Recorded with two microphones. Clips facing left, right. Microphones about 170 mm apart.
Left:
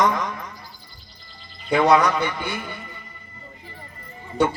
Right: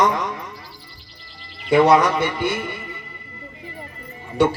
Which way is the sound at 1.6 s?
90° right.